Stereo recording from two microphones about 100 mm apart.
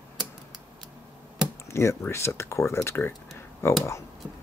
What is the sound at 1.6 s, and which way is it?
Speech, 30° left (ahead or behind).